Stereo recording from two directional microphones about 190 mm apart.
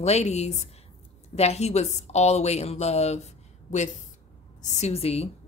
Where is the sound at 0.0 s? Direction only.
35° left (ahead or behind).